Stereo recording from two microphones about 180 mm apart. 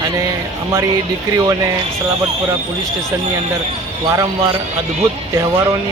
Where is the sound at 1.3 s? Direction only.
15° right (ahead or behind).